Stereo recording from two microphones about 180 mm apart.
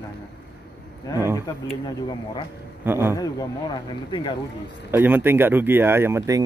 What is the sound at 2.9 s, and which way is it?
Speech, 10° right (ahead or behind).